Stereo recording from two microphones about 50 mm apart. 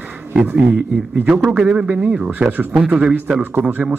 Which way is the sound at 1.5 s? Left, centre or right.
Centre.